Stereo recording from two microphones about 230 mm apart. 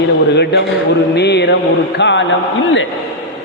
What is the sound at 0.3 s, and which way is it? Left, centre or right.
A man's voice, left.